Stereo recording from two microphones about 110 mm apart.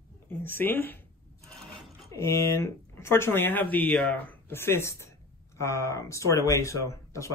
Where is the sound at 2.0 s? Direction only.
25° left (ahead or behind).